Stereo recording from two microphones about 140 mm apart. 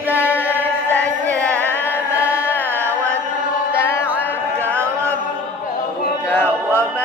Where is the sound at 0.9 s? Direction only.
10° left (ahead or behind).